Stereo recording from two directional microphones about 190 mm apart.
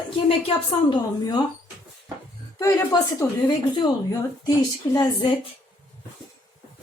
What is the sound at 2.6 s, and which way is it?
A woman's voice, 15° left (ahead or behind).